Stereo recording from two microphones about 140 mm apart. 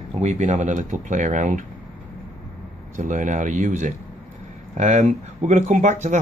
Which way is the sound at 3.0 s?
65° right (ahead or behind).